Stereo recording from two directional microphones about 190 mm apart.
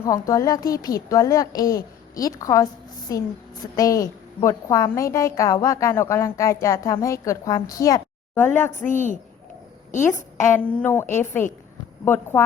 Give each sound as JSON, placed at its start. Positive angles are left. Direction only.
{"t": 0.0, "sound": "a woman's voice", "side_deg": 20}
{"t": 8.8, "sound": "a woman's voice", "side_deg": 40}
{"t": 10.5, "sound": "a woman's voice", "side_deg": 10}